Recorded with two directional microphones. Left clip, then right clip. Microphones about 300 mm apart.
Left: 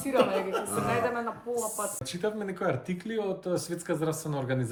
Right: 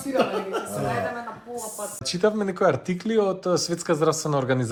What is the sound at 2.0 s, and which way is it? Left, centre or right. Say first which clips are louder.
Speech: right 14 dB; centre.